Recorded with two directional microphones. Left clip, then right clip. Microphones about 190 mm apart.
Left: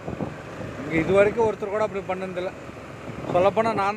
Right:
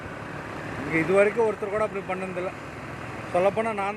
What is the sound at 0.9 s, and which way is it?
Speech, 20° left (ahead or behind).